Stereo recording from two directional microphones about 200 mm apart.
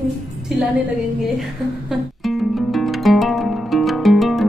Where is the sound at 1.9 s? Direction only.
Centre (ahead or behind).